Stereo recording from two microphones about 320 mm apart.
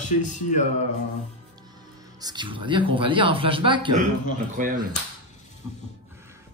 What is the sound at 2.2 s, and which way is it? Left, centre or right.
Speech, centre.